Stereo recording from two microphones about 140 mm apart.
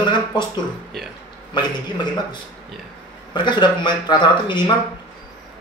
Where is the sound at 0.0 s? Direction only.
30° left (ahead or behind).